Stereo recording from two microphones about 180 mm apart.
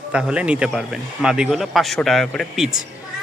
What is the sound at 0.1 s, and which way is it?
Speech, 5° right (ahead or behind).